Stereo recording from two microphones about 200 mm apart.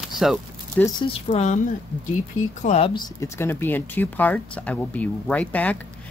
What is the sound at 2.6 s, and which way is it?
Speech, 30° left (ahead or behind).